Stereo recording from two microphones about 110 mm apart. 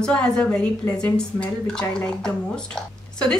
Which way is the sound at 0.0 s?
5° left (ahead or behind).